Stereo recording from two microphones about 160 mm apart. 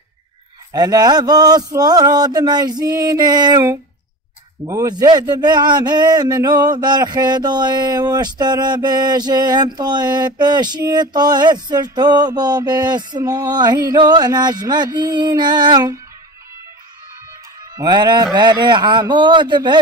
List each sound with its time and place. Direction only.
0.7 s a man's voice: 25° right (ahead or behind)
17.7 s a man's voice: 25° right (ahead or behind)